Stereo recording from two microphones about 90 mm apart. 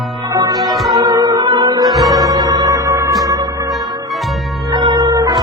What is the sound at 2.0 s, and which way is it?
Music, 40° right (ahead or behind).